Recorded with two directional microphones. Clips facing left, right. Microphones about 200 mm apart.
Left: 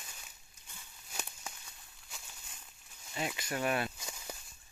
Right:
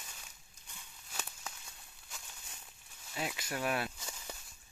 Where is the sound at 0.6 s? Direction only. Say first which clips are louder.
Even; 5° left (ahead or behind).